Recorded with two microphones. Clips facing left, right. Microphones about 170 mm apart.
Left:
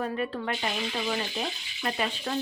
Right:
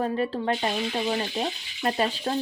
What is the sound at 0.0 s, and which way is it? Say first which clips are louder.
A woman's voice: right 4 dB; 30° right (ahead or behind).